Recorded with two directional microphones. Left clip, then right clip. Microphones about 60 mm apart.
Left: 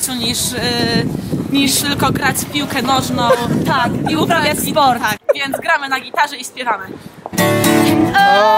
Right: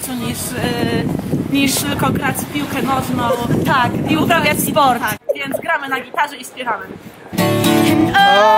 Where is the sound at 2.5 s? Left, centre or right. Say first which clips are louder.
Left 3 dB; left.